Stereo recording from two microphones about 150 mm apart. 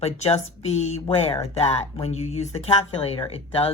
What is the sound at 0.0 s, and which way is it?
Speech, 45° left (ahead or behind).